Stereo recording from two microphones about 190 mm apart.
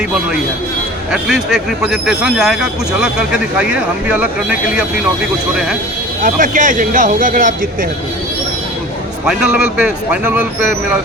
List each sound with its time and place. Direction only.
1.1 s speech: centre (ahead or behind)
6.2 s speech: 45° right (ahead or behind)
9.2 s speech: 5° right (ahead or behind)